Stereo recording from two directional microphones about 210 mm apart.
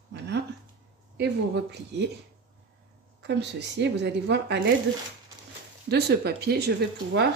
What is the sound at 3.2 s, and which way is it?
Speech, 55° right (ahead or behind).